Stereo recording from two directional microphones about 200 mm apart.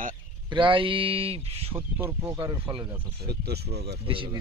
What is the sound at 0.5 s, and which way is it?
Speech, 25° right (ahead or behind).